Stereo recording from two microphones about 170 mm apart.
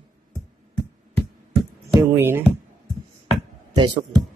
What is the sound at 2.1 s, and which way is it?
Speech, 15° right (ahead or behind).